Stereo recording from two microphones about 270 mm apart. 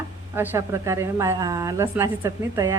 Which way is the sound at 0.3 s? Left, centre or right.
Centre.